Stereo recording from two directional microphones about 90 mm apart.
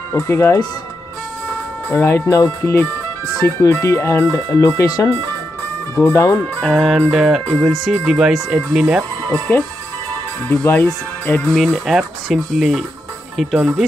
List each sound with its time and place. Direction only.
0.1 s speech: 30° left (ahead or behind)
1.9 s speech: 30° left (ahead or behind)
6.6 s speech: centre (ahead or behind)
9.3 s speech: 20° left (ahead or behind)
11.5 s speech: centre (ahead or behind)